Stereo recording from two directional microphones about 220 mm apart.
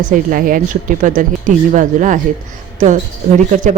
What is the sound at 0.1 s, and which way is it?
Speech, 40° right (ahead or behind).